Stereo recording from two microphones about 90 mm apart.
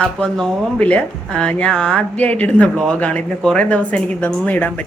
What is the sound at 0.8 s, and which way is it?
Speech, 15° left (ahead or behind).